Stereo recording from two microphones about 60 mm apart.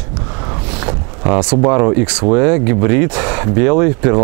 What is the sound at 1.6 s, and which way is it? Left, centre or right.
Speech, right.